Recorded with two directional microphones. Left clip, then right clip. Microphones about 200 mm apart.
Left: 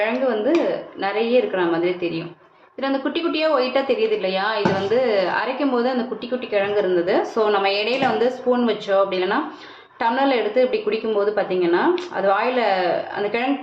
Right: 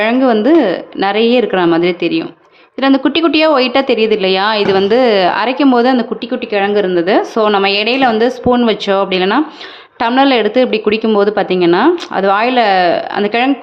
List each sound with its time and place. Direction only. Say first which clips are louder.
0.0 s a woman's voice: right 9 dB; 60° right (ahead or behind)